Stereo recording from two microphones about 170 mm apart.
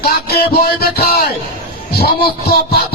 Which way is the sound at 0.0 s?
60° left (ahead or behind).